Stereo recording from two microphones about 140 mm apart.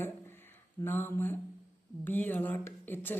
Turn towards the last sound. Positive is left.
turn(degrees=15)  # may be behind; listen again after turning